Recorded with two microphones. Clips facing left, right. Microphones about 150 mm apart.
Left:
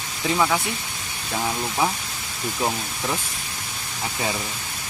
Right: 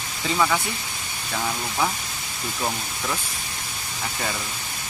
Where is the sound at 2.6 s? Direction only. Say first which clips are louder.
Left 3 dB; 15° left (ahead or behind).